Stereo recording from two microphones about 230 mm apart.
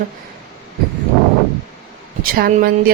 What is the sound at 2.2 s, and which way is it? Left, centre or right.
Speech, right.